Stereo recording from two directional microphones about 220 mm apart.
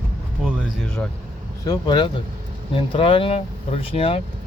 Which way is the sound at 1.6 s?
20° left (ahead or behind).